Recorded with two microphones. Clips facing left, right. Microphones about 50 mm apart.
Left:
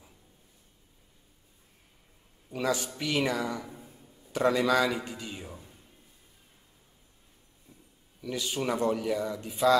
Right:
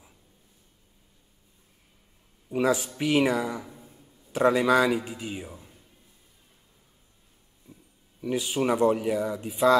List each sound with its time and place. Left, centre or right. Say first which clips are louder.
2.5 s a man's voice: right 5 dB; centre
3.7 s a sound: left 1 dB; centre
4.3 s a man's voice: right 4 dB; centre
8.2 s speech: right 6 dB; right
8.5 s a man's voice: right 5 dB; centre